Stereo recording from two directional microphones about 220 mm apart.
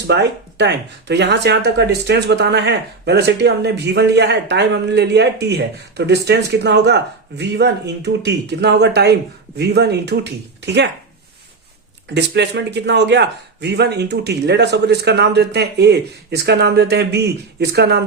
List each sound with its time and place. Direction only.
0.1 s speech: 50° right (ahead or behind)
12.1 s speech: 50° right (ahead or behind)